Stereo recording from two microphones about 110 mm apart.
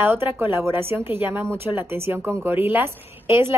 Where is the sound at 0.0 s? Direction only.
20° right (ahead or behind).